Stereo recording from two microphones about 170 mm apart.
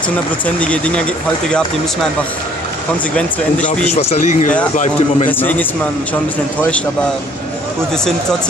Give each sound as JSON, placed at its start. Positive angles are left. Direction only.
{"t": 0.6, "sound": "speech", "side_deg": 5}
{"t": 3.6, "sound": "speech", "side_deg": 45}
{"t": 5.4, "sound": "speech", "side_deg": 10}
{"t": 7.9, "sound": "speech", "side_deg": 5}